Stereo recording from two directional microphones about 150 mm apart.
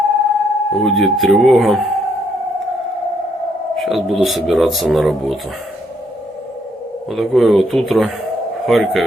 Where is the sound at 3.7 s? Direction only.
Centre (ahead or behind).